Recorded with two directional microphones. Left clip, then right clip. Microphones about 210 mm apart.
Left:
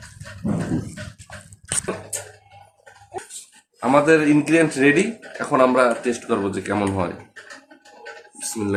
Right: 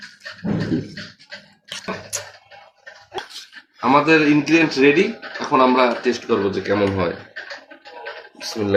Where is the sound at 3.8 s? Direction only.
20° left (ahead or behind).